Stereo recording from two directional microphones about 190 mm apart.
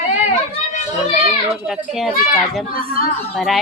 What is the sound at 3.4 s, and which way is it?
Speech, centre (ahead or behind).